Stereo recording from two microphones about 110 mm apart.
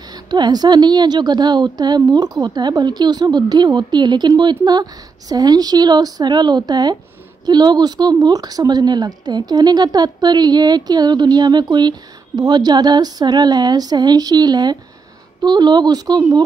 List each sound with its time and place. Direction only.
0.1 s speech: 40° right (ahead or behind)